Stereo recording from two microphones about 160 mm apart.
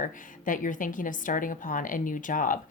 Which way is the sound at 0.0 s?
55° left (ahead or behind).